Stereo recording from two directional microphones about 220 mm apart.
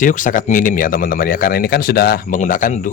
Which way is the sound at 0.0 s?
35° left (ahead or behind).